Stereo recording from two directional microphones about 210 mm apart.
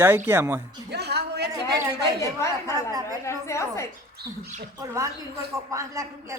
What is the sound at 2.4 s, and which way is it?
A woman's voice, 15° left (ahead or behind).